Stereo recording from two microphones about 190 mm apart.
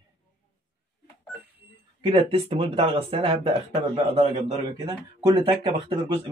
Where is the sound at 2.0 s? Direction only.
30° right (ahead or behind).